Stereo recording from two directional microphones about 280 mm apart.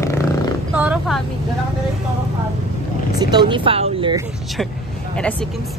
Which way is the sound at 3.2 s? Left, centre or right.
Centre.